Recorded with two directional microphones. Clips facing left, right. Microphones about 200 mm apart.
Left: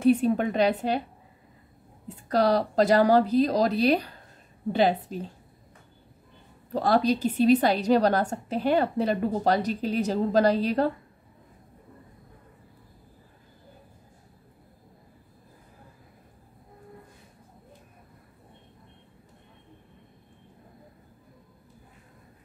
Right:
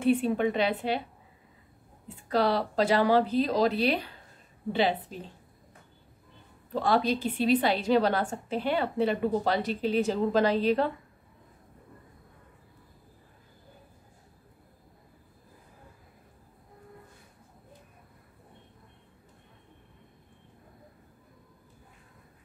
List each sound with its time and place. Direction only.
0.0 s a woman's voice: 40° left (ahead or behind)
2.0 s a woman's voice: 40° left (ahead or behind)
6.7 s a woman's voice: 40° left (ahead or behind)